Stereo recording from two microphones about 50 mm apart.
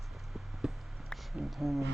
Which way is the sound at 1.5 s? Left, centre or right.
Centre.